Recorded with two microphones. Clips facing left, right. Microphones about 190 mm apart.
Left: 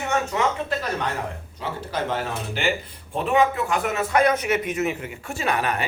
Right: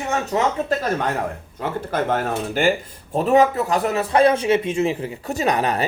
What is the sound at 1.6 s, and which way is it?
Speech, 50° right (ahead or behind).